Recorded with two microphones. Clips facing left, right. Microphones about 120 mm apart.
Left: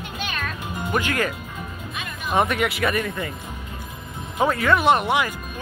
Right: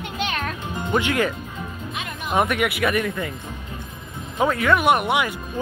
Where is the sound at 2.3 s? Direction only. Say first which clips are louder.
Even; 5° right (ahead or behind).